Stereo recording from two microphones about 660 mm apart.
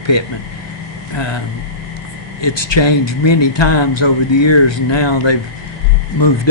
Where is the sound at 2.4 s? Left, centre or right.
Left.